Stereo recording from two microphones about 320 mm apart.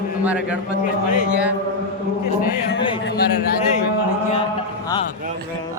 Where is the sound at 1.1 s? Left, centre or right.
Left.